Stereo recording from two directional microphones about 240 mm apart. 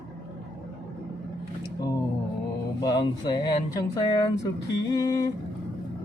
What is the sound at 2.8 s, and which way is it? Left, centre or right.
Speech, centre.